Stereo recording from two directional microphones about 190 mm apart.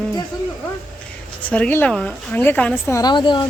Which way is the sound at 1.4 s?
5° left (ahead or behind).